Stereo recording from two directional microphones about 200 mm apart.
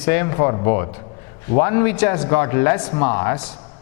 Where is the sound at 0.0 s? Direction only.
15° left (ahead or behind).